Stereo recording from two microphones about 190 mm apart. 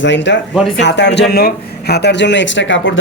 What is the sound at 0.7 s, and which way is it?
Speech, 65° left (ahead or behind).